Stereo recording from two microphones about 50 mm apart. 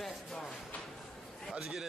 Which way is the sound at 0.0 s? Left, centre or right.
Centre.